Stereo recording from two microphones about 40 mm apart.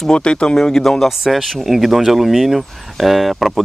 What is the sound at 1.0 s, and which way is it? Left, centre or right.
Speech, centre.